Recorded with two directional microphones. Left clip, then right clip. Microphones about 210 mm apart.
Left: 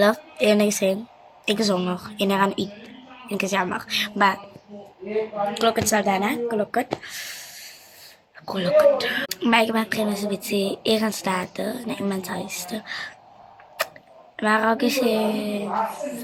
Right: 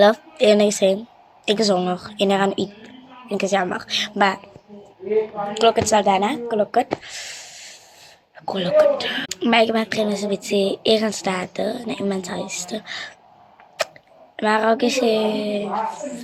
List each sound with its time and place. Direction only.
0.0 s a woman's voice: 15° left (ahead or behind)
5.5 s a woman's voice: 15° left (ahead or behind)
7.0 s a sound: 15° left (ahead or behind)
8.4 s a woman's voice: 15° left (ahead or behind)
13.8 s a sound: 15° left (ahead or behind)
14.3 s a woman's voice: 15° left (ahead or behind)